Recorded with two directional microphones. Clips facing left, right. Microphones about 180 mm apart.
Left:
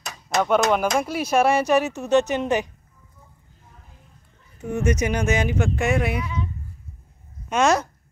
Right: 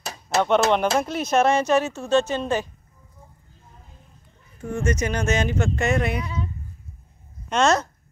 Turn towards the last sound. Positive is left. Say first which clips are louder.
# even
turn(degrees=10)  # may be behind; listen again after turning